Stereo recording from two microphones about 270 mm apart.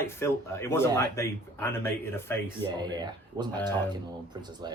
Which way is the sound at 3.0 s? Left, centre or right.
Centre.